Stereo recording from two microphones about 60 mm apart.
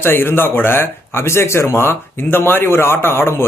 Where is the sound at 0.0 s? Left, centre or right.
Left.